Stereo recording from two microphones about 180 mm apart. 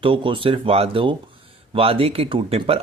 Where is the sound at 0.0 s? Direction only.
30° right (ahead or behind).